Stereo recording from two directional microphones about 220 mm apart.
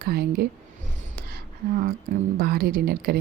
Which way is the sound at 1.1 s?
45° right (ahead or behind).